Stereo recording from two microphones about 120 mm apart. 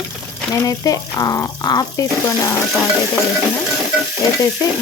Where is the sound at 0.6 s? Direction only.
30° left (ahead or behind).